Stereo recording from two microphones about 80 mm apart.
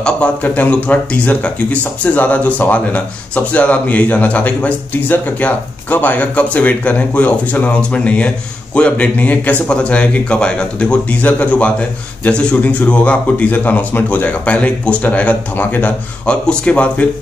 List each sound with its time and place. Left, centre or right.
0.0 s speech: centre